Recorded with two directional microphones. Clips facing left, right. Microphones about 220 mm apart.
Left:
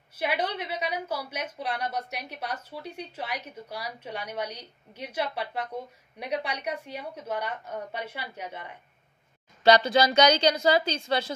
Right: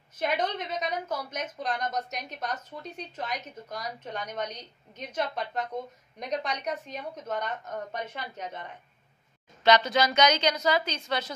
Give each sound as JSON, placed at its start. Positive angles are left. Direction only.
{"t": 0.1, "sound": "a woman's voice", "side_deg": 10}
{"t": 9.6, "sound": "a woman's voice", "side_deg": 35}